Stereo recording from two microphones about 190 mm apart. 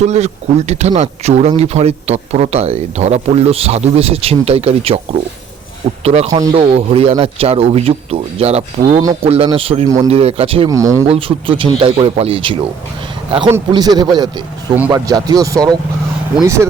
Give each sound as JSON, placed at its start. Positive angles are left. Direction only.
{"t": 0.0, "sound": "speech", "side_deg": -35}
{"t": 6.0, "sound": "speech", "side_deg": -35}
{"t": 10.7, "sound": "speech", "side_deg": -15}
{"t": 11.1, "sound": "speech", "side_deg": -30}
{"t": 13.7, "sound": "speech", "side_deg": -20}